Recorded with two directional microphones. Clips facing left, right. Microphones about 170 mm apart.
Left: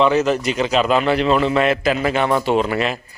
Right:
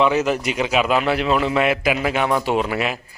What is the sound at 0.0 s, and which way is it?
A man's voice, 10° right (ahead or behind).